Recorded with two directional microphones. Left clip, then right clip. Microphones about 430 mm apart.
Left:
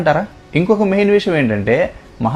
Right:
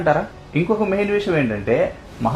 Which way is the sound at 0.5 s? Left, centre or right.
Left.